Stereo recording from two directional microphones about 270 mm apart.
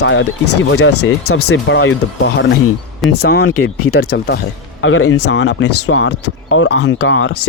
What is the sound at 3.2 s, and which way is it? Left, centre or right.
Speech, left.